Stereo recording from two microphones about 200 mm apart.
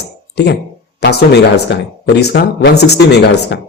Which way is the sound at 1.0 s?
55° left (ahead or behind).